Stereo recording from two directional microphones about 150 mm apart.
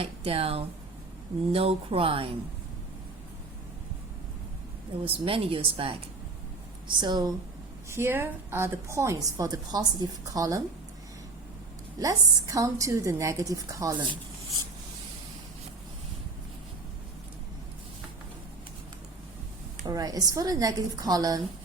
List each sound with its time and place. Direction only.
0.0 s speech: 40° right (ahead or behind)
5.0 s a woman's voice: 40° right (ahead or behind)
7.9 s a woman's voice: 15° right (ahead or behind)
11.9 s a woman's voice: 25° right (ahead or behind)
19.8 s a woman's voice: 25° right (ahead or behind)